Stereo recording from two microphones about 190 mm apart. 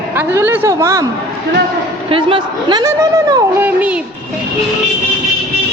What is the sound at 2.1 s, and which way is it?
A woman's voice, 25° right (ahead or behind).